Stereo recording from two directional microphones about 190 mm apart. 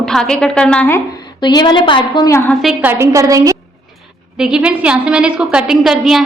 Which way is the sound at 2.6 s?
Centre (ahead or behind).